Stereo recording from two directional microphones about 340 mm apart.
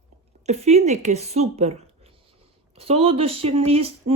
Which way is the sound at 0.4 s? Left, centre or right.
Centre.